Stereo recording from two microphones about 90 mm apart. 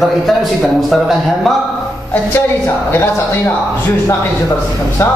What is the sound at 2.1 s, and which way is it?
A woman's voice, 25° left (ahead or behind).